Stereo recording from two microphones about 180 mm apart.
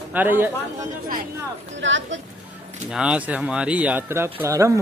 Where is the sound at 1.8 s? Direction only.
90° right.